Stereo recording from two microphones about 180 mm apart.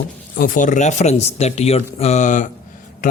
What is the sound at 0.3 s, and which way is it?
Speech, 50° left (ahead or behind).